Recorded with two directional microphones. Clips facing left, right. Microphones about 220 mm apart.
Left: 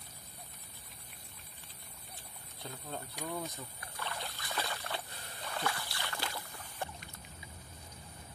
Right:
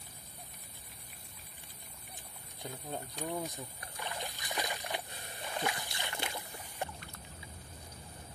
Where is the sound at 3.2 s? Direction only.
15° right (ahead or behind).